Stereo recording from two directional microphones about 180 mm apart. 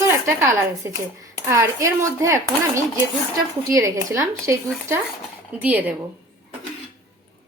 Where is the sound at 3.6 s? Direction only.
20° right (ahead or behind).